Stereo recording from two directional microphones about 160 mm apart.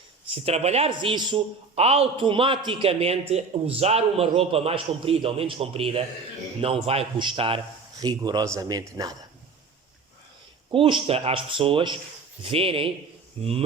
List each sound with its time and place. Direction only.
0.3 s a man's voice: 40° right (ahead or behind)
1.7 s a man's voice: 40° right (ahead or behind)
7.9 s speech: 25° right (ahead or behind)
10.7 s a man's voice: 30° right (ahead or behind)